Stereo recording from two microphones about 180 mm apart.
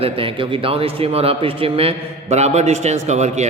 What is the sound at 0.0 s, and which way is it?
Speech, 30° right (ahead or behind).